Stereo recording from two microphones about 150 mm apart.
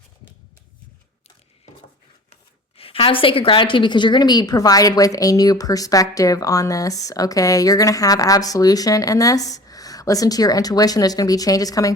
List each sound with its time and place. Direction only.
2.3 s speech: 40° left (ahead or behind); by 11.9 s 25° left (ahead or behind)